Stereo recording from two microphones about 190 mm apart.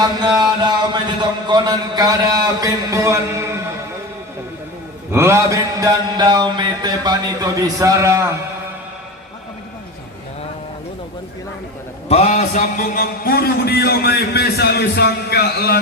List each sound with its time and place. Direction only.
0.0 s a sound: 20° right (ahead or behind)
1.5 s a man's voice: 20° right (ahead or behind)
5.1 s mantra: 15° right (ahead or behind)
12.0 s a man's voice: 35° left (ahead or behind); by 15.8 s 55° left (ahead or behind)